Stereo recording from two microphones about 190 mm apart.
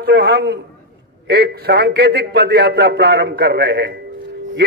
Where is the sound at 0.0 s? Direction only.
60° right (ahead or behind).